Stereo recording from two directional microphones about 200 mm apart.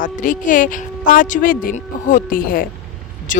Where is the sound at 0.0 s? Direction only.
40° left (ahead or behind).